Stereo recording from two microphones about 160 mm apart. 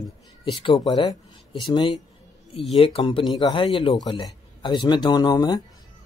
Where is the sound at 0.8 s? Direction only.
25° left (ahead or behind).